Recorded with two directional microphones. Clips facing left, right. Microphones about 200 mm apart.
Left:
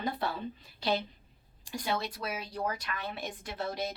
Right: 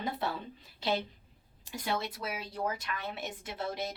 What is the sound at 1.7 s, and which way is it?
A woman's voice, 25° right (ahead or behind).